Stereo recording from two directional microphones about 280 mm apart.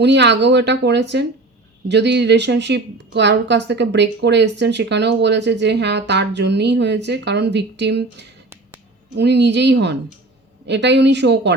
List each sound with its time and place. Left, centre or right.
0.0 s a woman's voice: right